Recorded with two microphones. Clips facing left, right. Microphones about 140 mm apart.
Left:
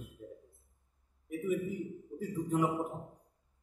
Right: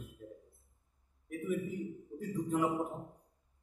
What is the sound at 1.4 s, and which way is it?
A man's voice, 10° left (ahead or behind).